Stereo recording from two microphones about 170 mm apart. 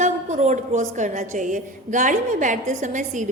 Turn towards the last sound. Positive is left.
turn(degrees=-45)  # may be behind; listen again after turning